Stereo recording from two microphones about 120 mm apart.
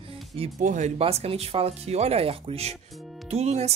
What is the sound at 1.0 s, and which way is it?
Speech, 55° right (ahead or behind).